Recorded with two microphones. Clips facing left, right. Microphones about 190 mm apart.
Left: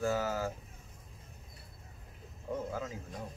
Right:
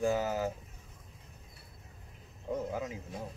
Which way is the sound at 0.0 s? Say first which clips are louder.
Right 2 dB; 15° right (ahead or behind).